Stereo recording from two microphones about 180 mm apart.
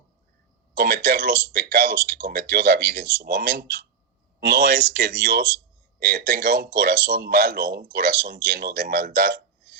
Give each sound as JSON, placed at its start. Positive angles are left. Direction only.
{"t": 0.7, "sound": "speech", "side_deg": -55}